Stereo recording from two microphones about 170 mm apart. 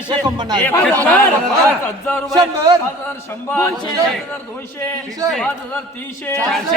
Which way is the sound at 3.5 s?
20° left (ahead or behind).